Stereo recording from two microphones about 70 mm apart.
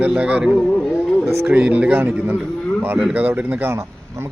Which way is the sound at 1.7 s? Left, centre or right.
Right.